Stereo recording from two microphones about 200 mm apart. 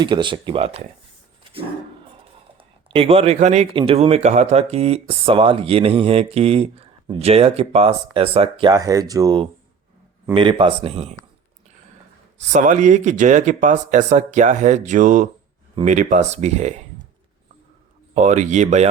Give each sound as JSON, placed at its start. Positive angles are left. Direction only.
{"t": 0.0, "sound": "speech", "side_deg": -25}
{"t": 2.6, "sound": "speech", "side_deg": -25}
{"t": 12.4, "sound": "speech", "side_deg": -35}
{"t": 18.1, "sound": "speech", "side_deg": -35}